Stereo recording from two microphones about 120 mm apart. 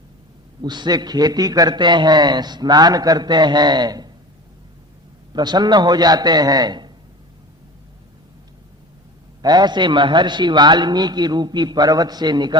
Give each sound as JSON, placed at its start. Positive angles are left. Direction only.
{"t": 0.6, "sound": "a man's voice", "side_deg": -35}
{"t": 5.3, "sound": "a man's voice", "side_deg": -35}
{"t": 9.4, "sound": "a man's voice", "side_deg": -35}